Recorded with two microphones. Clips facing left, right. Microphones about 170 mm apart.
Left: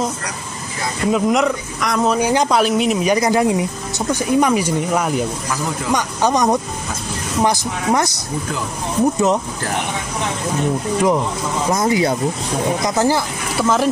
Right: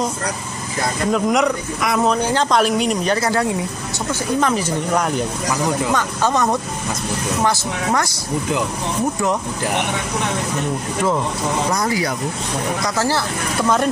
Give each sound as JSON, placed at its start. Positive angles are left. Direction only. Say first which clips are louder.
{"t": 1.1, "sound": "a man's voice", "louder": "left 1 dB", "side_deg": 0}
{"t": 2.1, "sound": "speech", "louder": "left 2 dB", "side_deg": 10}
{"t": 2.6, "sound": "speech", "louder": "left 2 dB", "side_deg": 0}
{"t": 5.9, "sound": "speech", "louder": "left 1 dB", "side_deg": 15}
{"t": 11.7, "sound": "speech", "louder": "left 4 dB", "side_deg": 20}
{"t": 13.6, "sound": "a man's voice", "louder": "left 1 dB", "side_deg": 5}